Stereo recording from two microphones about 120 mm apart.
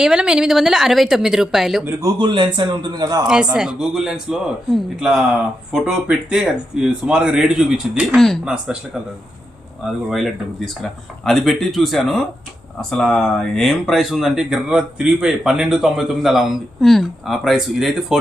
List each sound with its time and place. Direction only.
0.0 s speech: 5° right (ahead or behind)
2.0 s a man's voice: 35° right (ahead or behind)
3.2 s speech: 5° right (ahead or behind)
9.8 s speech: centre (ahead or behind)
11.3 s speech: centre (ahead or behind)